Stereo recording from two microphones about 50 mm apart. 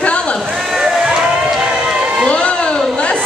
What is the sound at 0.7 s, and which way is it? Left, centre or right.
Run, centre.